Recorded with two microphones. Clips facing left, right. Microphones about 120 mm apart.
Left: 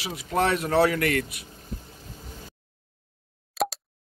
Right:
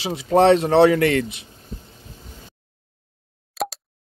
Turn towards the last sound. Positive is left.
turn(degrees=0)  # may be behind; listen again after turning